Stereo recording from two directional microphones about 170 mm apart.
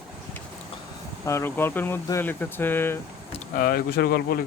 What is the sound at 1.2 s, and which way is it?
Speech, 15° left (ahead or behind).